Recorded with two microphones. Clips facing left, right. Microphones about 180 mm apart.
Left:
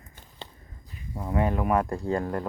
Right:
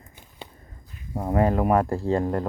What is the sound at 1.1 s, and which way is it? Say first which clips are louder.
Speech: right 5 dB; 45° right (ahead or behind).